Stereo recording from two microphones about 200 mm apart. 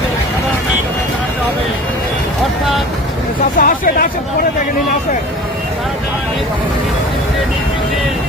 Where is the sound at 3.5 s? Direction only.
45° left (ahead or behind).